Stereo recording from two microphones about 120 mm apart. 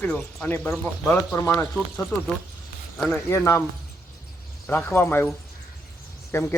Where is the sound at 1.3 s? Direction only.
20° left (ahead or behind).